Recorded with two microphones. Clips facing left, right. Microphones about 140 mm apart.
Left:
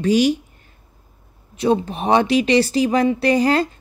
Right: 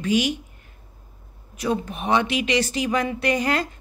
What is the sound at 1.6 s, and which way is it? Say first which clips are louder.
A woman's voice: left 7 dB; 30° left (ahead or behind).